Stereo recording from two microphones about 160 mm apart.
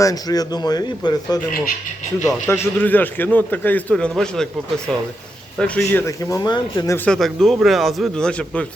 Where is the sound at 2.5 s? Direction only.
10° left (ahead or behind).